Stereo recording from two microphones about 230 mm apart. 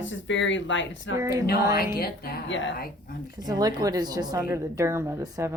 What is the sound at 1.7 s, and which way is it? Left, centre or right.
A woman's voice, left.